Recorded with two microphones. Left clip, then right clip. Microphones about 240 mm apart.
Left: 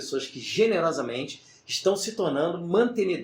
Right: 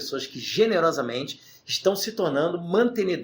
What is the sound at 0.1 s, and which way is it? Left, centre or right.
Speech, right.